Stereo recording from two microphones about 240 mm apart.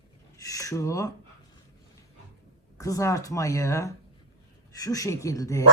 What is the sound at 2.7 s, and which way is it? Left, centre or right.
Speech, centre.